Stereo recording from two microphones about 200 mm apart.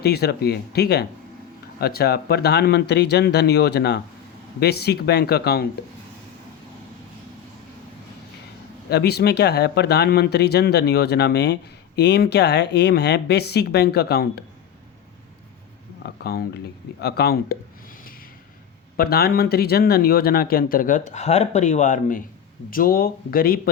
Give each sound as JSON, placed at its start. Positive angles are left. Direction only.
{"t": 0.0, "sound": "speech", "side_deg": 55}
{"t": 8.9, "sound": "speech", "side_deg": 55}
{"t": 16.0, "sound": "speech", "side_deg": 50}
{"t": 18.9, "sound": "speech", "side_deg": 50}